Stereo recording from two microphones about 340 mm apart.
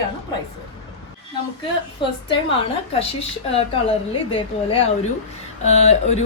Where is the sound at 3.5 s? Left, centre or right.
Centre.